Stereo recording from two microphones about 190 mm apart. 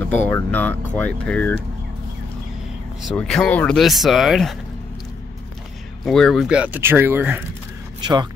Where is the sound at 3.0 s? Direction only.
5° left (ahead or behind).